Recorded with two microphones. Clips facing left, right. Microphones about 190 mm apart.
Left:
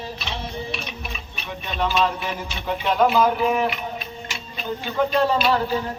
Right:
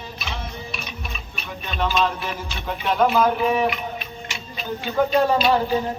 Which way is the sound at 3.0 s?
Centre (ahead or behind).